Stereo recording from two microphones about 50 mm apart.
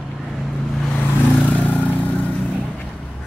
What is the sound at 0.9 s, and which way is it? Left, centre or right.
Vehicle, left.